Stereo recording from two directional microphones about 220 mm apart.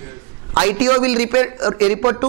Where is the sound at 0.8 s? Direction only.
10° right (ahead or behind).